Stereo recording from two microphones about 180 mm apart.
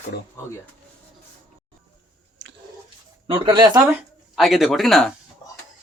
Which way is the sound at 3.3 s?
25° right (ahead or behind).